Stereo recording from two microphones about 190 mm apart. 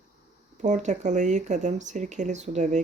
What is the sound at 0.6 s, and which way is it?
Speech, 40° right (ahead or behind).